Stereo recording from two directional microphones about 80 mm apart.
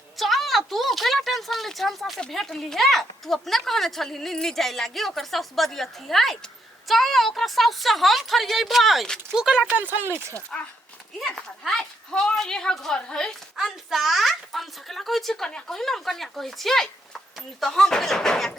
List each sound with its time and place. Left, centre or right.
0.2 s speech: centre
9.3 s speech: centre
9.7 s speech: right
11.6 s a woman's voice: centre
13.6 s speech: centre